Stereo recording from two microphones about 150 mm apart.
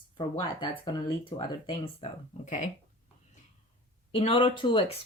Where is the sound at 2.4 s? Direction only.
55° left (ahead or behind).